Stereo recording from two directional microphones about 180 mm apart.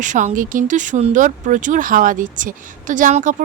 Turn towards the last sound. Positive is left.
turn(degrees=-45)  # may be behind; listen again after turning